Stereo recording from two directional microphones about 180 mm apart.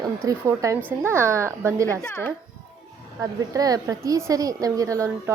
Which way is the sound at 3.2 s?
20° right (ahead or behind).